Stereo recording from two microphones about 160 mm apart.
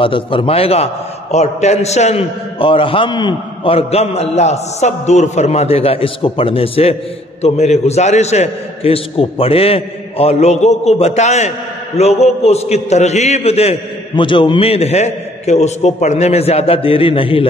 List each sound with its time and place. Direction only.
0.0 s a man's voice: 35° left (ahead or behind)